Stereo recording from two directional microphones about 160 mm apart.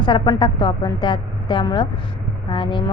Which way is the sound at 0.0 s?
30° left (ahead or behind).